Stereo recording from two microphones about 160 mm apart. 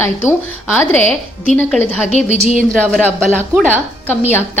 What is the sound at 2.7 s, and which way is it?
Speech, centre (ahead or behind).